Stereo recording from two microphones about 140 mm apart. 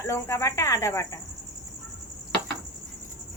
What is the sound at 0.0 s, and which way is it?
Speech, 20° left (ahead or behind).